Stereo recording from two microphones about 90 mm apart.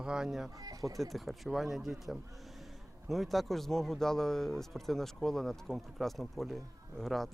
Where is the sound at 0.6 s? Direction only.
40° right (ahead or behind).